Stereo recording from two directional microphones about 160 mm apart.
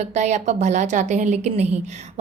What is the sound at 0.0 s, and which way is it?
A woman's voice, 45° right (ahead or behind).